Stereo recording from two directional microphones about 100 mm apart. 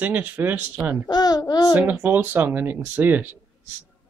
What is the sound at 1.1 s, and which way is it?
Child singing, 40° left (ahead or behind).